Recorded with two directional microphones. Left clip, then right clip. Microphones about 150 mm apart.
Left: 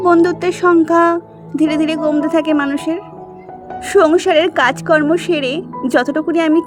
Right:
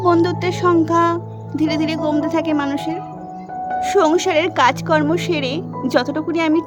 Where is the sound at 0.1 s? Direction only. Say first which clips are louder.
Left 5 dB; 20° left (ahead or behind).